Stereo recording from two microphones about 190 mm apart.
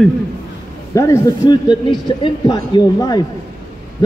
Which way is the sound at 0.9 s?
20° left (ahead or behind).